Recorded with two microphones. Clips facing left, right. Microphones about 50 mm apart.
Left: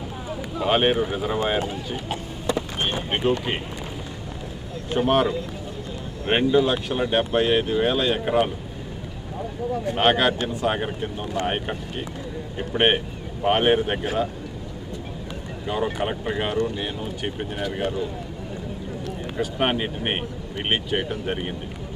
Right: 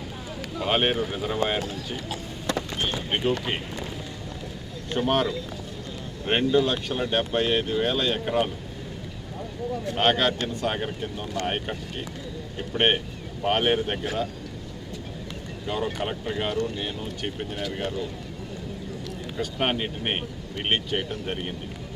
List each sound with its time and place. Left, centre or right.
0.6 s speech: centre
2.7 s speech: left
3.1 s speech: centre
4.9 s speech: centre
9.8 s speech: centre
15.6 s speech: centre
19.0 s speech: centre